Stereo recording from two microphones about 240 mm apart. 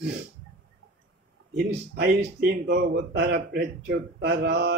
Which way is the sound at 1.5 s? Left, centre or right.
Right.